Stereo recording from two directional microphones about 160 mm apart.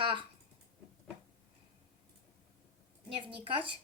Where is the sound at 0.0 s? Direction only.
30° right (ahead or behind).